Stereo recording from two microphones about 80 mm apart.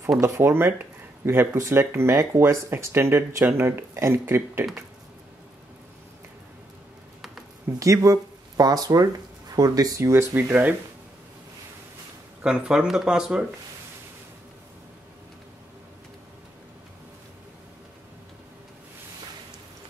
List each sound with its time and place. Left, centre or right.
0.2 s speech: right
7.8 s speech: right
10.3 s speech: right
12.4 s speech: centre